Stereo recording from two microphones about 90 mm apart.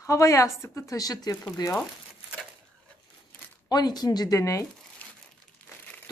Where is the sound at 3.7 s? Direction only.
50° left (ahead or behind).